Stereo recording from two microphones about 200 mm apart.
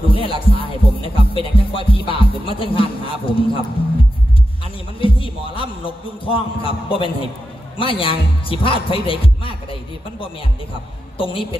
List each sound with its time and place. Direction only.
0.1 s music: 25° left (ahead or behind)
5.0 s a sound: 25° left (ahead or behind)
6.2 s speech: 25° left (ahead or behind)
11.1 s speech: 25° left (ahead or behind)